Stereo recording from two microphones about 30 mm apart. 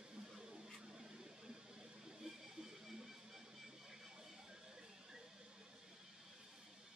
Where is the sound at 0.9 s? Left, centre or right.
Right.